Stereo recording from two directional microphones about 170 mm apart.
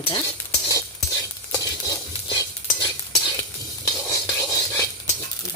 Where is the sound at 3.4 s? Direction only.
20° left (ahead or behind).